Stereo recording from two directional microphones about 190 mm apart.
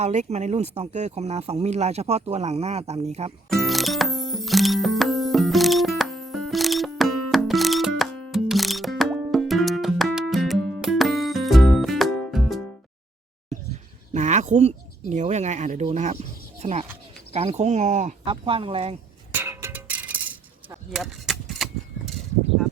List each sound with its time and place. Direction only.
0.0 s speech: 35° right (ahead or behind)
3.5 s music: centre (ahead or behind)
14.1 s a sound: 40° right (ahead or behind)
16.6 s speech: 35° right (ahead or behind)
18.3 s speech: 30° right (ahead or behind)
19.3 s chink: 10° right (ahead or behind)